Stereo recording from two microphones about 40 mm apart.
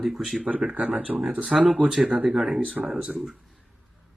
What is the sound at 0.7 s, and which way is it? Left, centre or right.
Speech, right.